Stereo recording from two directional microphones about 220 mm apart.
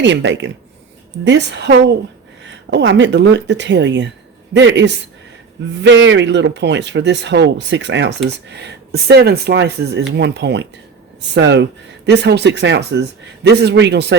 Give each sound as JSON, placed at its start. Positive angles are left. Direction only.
{"t": 0.0, "sound": "speech", "side_deg": -55}